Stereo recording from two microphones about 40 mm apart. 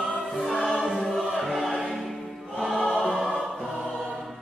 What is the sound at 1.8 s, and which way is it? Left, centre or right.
Choir, centre.